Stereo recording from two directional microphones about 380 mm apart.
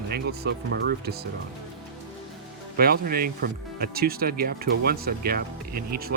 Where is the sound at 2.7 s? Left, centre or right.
Right.